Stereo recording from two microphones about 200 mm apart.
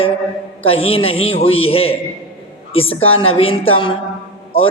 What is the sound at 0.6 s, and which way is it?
A man's voice, 30° left (ahead or behind).